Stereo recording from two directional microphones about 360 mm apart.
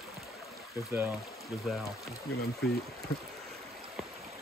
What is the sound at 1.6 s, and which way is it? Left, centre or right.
Speech, centre.